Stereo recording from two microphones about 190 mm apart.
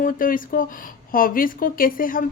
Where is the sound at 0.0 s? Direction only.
45° left (ahead or behind).